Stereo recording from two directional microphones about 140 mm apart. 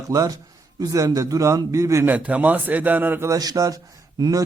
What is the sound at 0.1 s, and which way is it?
A man's voice, 25° right (ahead or behind).